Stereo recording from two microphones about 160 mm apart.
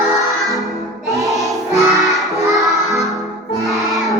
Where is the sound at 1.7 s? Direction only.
20° right (ahead or behind).